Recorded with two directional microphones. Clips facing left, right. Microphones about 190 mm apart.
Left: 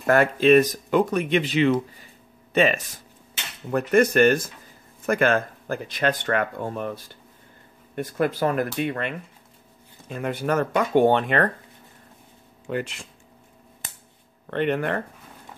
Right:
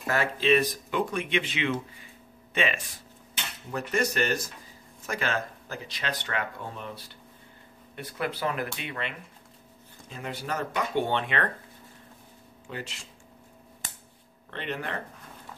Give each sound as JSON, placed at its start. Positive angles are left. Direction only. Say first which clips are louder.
{"t": 0.0, "sound": "speech", "louder": "left 9 dB", "side_deg": 55}
{"t": 3.7, "sound": "speech", "louder": "left 10 dB", "side_deg": 55}
{"t": 12.6, "sound": "speech", "louder": "left 10 dB", "side_deg": 55}
{"t": 14.5, "sound": "speech", "louder": "left 10 dB", "side_deg": 55}